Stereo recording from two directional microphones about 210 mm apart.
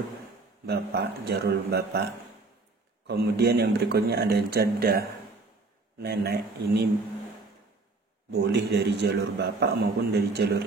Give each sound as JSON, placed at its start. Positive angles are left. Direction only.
{"t": 0.7, "sound": "a man's voice", "side_deg": -50}
{"t": 3.1, "sound": "a man's voice", "side_deg": -50}
{"t": 6.0, "sound": "a man's voice", "side_deg": -50}
{"t": 8.3, "sound": "a man's voice", "side_deg": -50}